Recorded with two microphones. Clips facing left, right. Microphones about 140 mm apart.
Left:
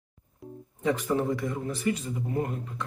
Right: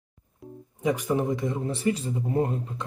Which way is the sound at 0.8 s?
10° right (ahead or behind).